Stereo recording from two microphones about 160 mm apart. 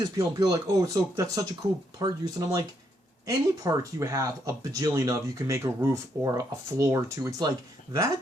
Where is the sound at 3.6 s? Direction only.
20° right (ahead or behind).